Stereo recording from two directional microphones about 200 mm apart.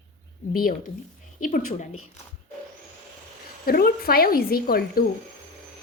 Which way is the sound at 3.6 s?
50° left (ahead or behind).